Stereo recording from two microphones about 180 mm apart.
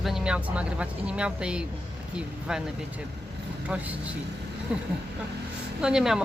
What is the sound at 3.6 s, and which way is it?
Speech, 5° right (ahead or behind).